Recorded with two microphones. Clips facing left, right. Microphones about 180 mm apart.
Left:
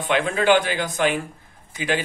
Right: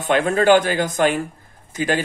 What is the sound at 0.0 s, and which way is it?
A man's voice, 45° right (ahead or behind).